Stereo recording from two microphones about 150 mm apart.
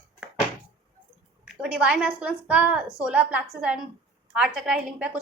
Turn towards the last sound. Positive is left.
turn(degrees=-10)  # may be behind; listen again after turning